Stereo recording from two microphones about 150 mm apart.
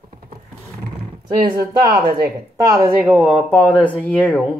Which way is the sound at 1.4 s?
75° right (ahead or behind).